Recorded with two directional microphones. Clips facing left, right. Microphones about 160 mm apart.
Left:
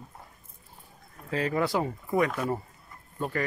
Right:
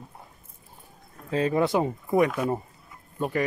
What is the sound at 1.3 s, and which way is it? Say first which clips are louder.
Speech: right 4 dB; 20° right (ahead or behind).